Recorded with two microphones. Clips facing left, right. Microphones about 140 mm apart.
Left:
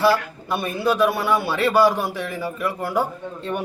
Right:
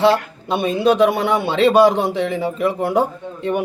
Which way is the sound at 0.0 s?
20° right (ahead or behind).